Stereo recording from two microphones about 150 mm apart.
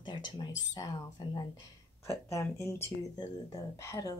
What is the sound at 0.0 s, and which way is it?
Speech, 30° left (ahead or behind).